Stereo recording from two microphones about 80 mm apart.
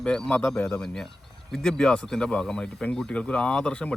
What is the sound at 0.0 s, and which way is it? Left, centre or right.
Speech, centre.